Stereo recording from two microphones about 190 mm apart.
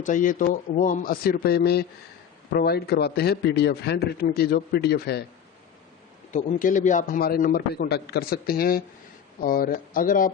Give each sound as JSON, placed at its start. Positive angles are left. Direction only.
{"t": 0.0, "sound": "a man's voice", "side_deg": 45}
{"t": 6.3, "sound": "a man's voice", "side_deg": 45}